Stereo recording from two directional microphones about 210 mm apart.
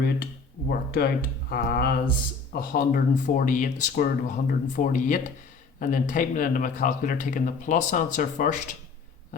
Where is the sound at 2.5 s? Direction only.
45° left (ahead or behind).